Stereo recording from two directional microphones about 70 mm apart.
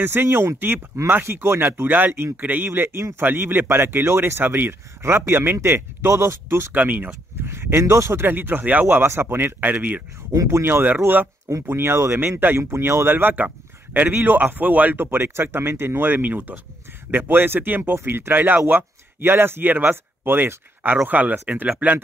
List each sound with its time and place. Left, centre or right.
0.0 s speech: right
3.3 s speech: right
6.7 s a man's voice: right
7.4 s speech: right
10.3 s speech: right
12.2 s a man's voice: right
15.0 s a man's voice: right
17.9 s a man's voice: right